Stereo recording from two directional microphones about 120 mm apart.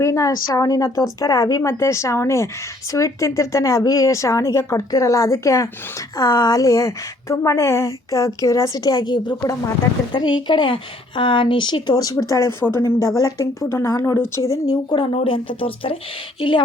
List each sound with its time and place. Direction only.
0.0 s a woman's voice: 25° left (ahead or behind)
15.1 s speech: 50° left (ahead or behind)